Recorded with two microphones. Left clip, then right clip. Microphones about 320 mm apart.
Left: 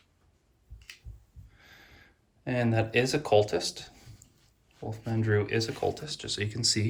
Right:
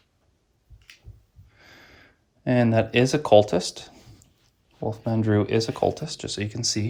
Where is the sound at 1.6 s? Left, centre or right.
Right.